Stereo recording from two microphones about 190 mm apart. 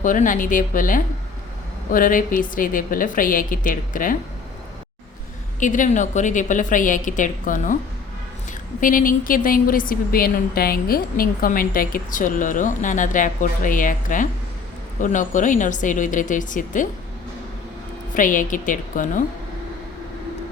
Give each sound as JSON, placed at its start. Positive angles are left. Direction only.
{"t": 0.0, "sound": "a woman's voice", "side_deg": 45}
{"t": 5.5, "sound": "a woman's voice", "side_deg": 45}
{"t": 8.8, "sound": "a woman's voice", "side_deg": 45}
{"t": 18.1, "sound": "a woman's voice", "side_deg": 45}